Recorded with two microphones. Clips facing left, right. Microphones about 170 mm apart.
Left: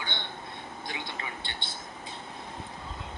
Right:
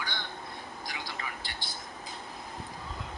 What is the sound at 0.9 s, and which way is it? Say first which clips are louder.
Whispering: left 2 dB; 25° left (ahead or behind).